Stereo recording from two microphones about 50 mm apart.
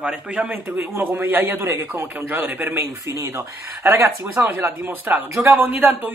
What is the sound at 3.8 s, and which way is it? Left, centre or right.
Speech, right.